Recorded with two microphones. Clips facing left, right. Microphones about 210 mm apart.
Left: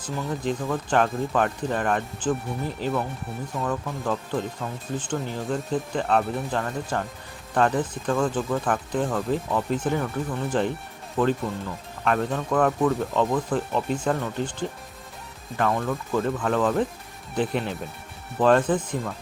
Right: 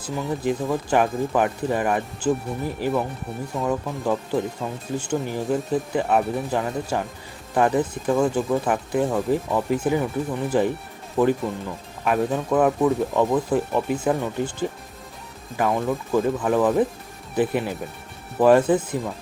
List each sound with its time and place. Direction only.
0.0 s speech: 10° right (ahead or behind)